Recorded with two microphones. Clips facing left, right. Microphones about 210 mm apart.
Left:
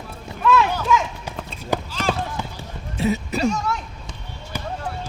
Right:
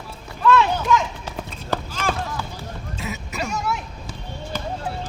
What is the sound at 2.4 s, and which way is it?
Basketball bounce, 20° left (ahead or behind).